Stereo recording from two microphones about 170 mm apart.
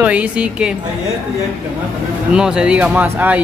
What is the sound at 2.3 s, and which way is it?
Speech, 5° right (ahead or behind).